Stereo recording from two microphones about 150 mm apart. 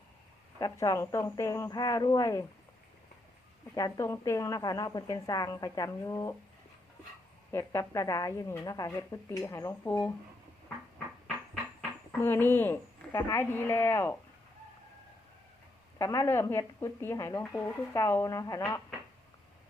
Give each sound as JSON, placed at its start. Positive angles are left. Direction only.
{"t": 0.6, "sound": "speech", "side_deg": 20}
{"t": 3.8, "sound": "speech", "side_deg": 20}
{"t": 7.5, "sound": "speech", "side_deg": 20}
{"t": 12.2, "sound": "a woman's voice", "side_deg": 15}
{"t": 16.0, "sound": "speech", "side_deg": 20}